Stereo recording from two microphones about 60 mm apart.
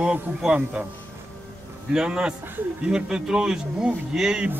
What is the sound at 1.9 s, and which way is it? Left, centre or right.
A man's voice, centre.